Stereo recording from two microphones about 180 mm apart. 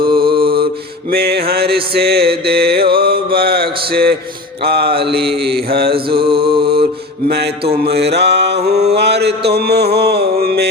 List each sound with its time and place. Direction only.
0.0 s mantra: 30° right (ahead or behind)
1.1 s mantra: 60° right (ahead or behind)
6.1 s mantra: 30° right (ahead or behind)
7.9 s mantra: 65° right (ahead or behind)